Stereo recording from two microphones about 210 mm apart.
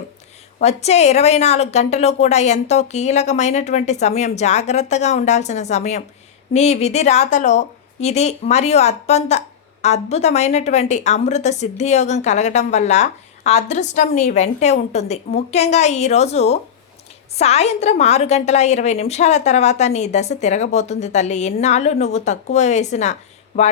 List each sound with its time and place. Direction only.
0.6 s a woman's voice: 30° left (ahead or behind)